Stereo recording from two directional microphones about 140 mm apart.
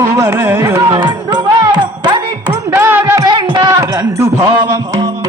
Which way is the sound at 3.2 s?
35° right (ahead or behind).